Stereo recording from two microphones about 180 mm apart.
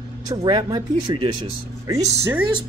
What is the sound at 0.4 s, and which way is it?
Speech, 25° right (ahead or behind).